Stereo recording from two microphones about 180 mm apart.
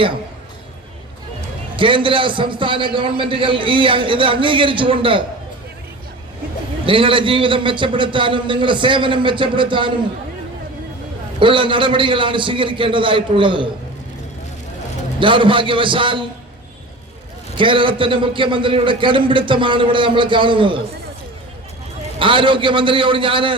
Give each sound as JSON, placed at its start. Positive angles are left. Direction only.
{"t": 1.7, "sound": "a man's voice", "side_deg": -30}
{"t": 6.8, "sound": "a man's voice", "side_deg": -30}
{"t": 11.3, "sound": "a man's voice", "side_deg": -30}
{"t": 15.2, "sound": "a man's voice", "side_deg": -30}
{"t": 17.6, "sound": "a man's voice", "side_deg": -30}
{"t": 22.2, "sound": "a man's voice", "side_deg": -30}